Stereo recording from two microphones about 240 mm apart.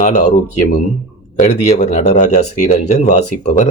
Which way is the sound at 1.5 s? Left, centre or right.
Left.